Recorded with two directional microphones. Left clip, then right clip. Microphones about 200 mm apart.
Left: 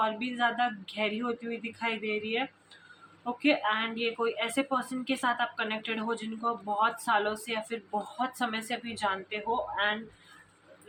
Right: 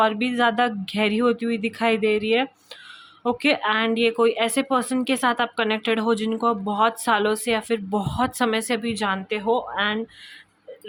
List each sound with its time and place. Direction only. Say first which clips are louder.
0.0 s speech: right 9 dB; 55° right (ahead or behind)